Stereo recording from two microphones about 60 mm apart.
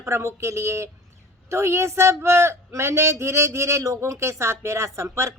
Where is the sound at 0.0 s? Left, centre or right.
Right.